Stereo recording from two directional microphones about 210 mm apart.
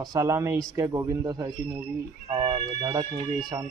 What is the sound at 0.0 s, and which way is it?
Speech, 15° right (ahead or behind).